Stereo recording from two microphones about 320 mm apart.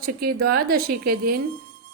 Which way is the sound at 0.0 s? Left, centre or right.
Right.